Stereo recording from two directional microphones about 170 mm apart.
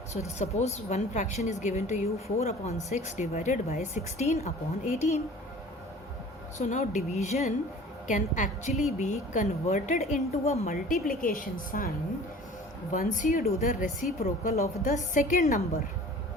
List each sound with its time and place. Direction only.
0.1 s a woman's voice: 40° left (ahead or behind)
6.6 s a woman's voice: 45° left (ahead or behind)
10.7 s a woman's voice: 55° left (ahead or behind)
12.9 s a woman's voice: 50° left (ahead or behind)